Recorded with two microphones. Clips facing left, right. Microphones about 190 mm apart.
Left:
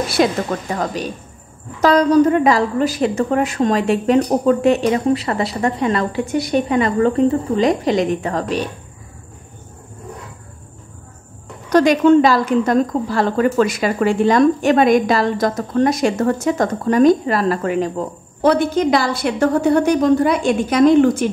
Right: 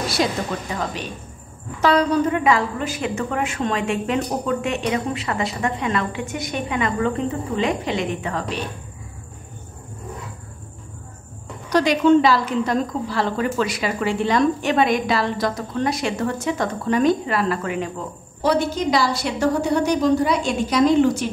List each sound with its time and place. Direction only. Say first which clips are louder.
0.2 s a woman's voice: left 6 dB; 55° left (ahead or behind)
1.8 s a woman's voice: left 6 dB; 40° left (ahead or behind)
11.7 s a woman's voice: left 4 dB; 50° left (ahead or behind)
18.4 s a woman's voice: left 5 dB; 55° left (ahead or behind)